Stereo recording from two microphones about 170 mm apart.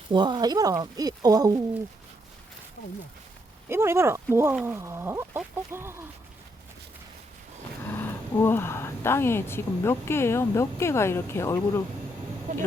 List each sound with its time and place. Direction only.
0.1 s speech: 25° right (ahead or behind)
3.7 s speech: 15° right (ahead or behind)
7.9 s speech: 15° left (ahead or behind)
12.5 s speech: 50° right (ahead or behind)